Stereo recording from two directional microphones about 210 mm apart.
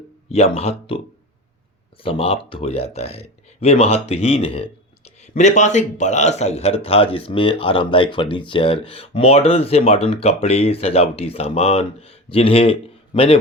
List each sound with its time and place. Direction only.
0.3 s a man's voice: 30° left (ahead or behind)
2.0 s a man's voice: 25° left (ahead or behind)